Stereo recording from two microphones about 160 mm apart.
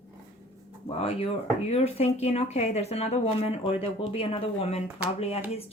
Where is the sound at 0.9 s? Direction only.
40° left (ahead or behind).